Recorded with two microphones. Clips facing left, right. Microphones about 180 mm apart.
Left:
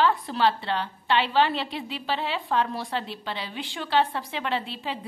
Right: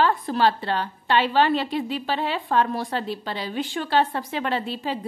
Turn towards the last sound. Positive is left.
turn(degrees=-45)  # may be behind; listen again after turning